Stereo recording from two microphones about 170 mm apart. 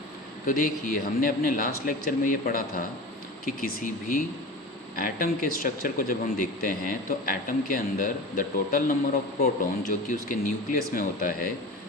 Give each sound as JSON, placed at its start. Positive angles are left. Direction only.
{"t": 0.4, "sound": "speech", "side_deg": 55}